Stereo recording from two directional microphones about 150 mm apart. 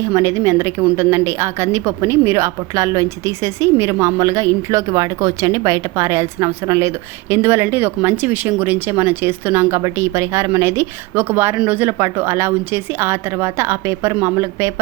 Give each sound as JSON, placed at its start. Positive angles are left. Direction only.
{"t": 0.0, "sound": "a woman's voice", "side_deg": -20}